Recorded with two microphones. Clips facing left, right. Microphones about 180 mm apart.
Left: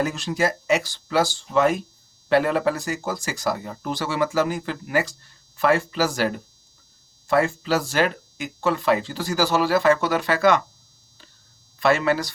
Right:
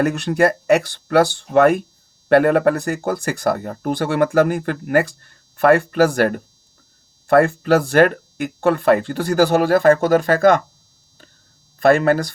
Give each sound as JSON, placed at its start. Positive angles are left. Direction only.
{"t": 0.0, "sound": "speech", "side_deg": -60}
{"t": 11.8, "sound": "speech", "side_deg": -50}